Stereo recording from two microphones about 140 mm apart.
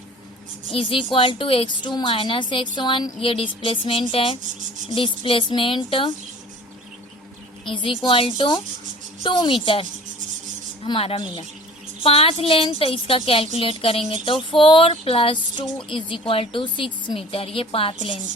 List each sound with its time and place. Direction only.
0.7 s a woman's voice: 40° left (ahead or behind)
7.7 s a woman's voice: 35° left (ahead or behind)
10.8 s a woman's voice: 40° left (ahead or behind)